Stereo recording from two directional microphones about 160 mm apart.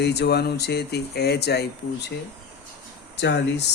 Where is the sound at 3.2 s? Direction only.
90° left.